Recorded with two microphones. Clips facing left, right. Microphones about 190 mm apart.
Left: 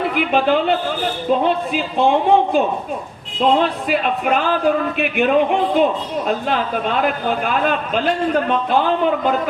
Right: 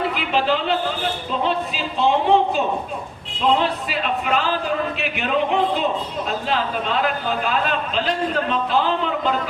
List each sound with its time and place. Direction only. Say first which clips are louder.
0.1 s a man's voice: left 5 dB; 50° left (ahead or behind)
3.6 s a man's voice: left 5 dB; 55° left (ahead or behind)